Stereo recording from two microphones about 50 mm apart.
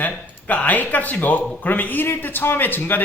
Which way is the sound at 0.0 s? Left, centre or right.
Left.